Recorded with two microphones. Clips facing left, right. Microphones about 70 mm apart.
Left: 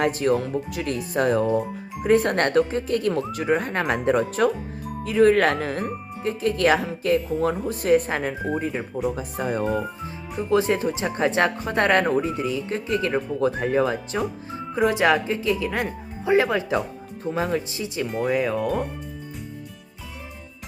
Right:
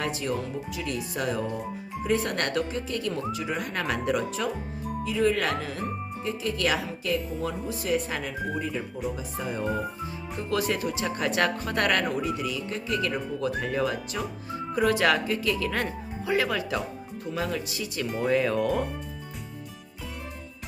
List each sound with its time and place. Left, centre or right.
0.0 s speech: left
10.5 s speech: left
18.3 s speech: centre